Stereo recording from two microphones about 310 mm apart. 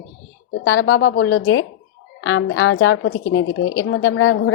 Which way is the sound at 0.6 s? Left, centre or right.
Left.